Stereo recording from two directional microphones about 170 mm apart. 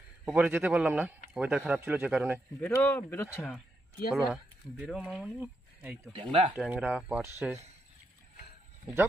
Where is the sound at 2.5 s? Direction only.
15° left (ahead or behind).